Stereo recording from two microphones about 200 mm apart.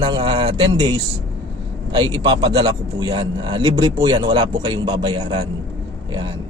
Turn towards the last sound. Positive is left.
turn(degrees=-20)  # may be behind; listen again after turning